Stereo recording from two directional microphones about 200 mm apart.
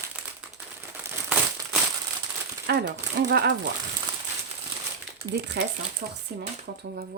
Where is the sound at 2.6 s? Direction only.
55° right (ahead or behind).